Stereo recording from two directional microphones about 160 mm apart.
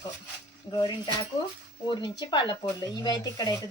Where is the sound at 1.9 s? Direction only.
25° left (ahead or behind).